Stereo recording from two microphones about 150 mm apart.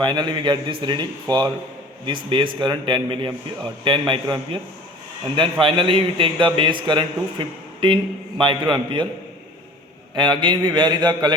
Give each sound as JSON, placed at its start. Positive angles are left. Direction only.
{"t": 0.0, "sound": "a man's voice", "side_deg": -30}
{"t": 10.2, "sound": "a man's voice", "side_deg": -30}